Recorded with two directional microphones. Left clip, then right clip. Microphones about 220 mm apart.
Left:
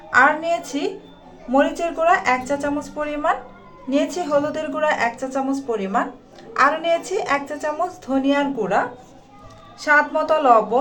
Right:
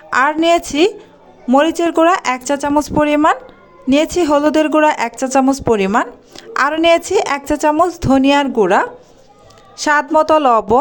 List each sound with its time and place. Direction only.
0.1 s a woman's voice: 50° right (ahead or behind)